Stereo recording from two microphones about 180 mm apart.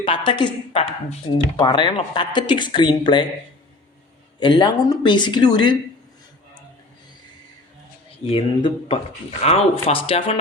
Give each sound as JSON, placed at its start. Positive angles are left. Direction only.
{"t": 0.0, "sound": "speech", "side_deg": 25}
{"t": 4.4, "sound": "speech", "side_deg": 25}
{"t": 8.2, "sound": "speech", "side_deg": 35}